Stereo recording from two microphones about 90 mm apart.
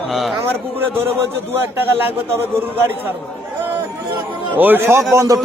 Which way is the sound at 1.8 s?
25° right (ahead or behind).